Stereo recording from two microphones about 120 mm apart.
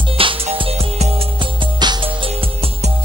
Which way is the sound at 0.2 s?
50° right (ahead or behind).